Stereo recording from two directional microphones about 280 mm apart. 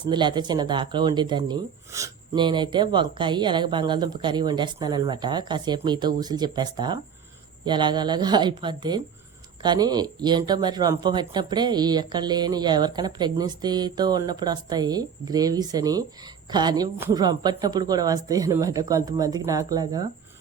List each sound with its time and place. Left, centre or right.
0.0 s speech: centre